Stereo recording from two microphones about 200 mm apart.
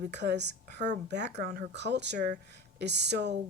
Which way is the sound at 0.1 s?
60° right (ahead or behind).